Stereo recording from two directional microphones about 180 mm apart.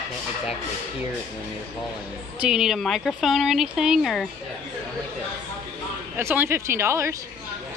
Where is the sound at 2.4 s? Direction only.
5° right (ahead or behind).